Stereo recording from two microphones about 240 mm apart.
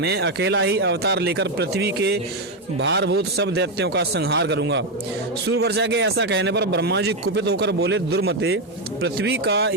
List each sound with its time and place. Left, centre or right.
0.0 s speech: right